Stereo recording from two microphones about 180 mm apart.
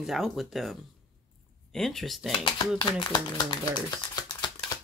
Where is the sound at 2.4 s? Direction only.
25° left (ahead or behind).